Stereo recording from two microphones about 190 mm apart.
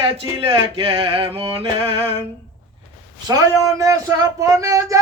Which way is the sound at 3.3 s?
15° right (ahead or behind).